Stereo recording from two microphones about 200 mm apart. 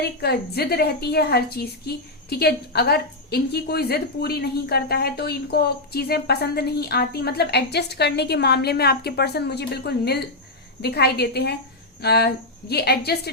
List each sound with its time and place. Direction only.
0.0 s a woman's voice: 55° left (ahead or behind)